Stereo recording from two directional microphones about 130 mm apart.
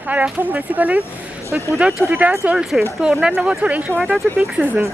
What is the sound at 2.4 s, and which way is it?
A woman's voice, centre (ahead or behind).